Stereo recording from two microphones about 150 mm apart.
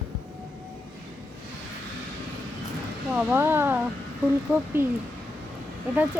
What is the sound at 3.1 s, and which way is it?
Speech, 15° right (ahead or behind).